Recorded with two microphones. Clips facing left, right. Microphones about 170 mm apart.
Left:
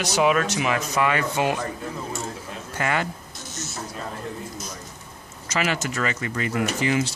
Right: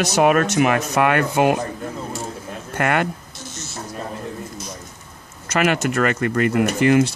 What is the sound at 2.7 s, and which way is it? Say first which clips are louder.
Speech: right 5 dB; 60° right (ahead or behind).